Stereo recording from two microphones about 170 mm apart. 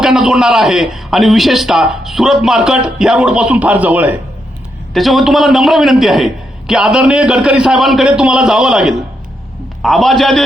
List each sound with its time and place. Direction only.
0.0 s a man's voice: centre (ahead or behind)